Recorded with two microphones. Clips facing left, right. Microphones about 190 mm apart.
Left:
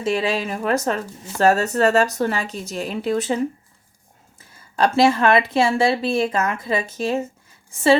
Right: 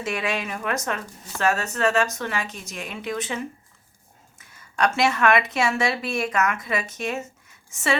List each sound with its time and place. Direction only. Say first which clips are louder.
0.0 s speech: left 6 dB; 30° left (ahead or behind)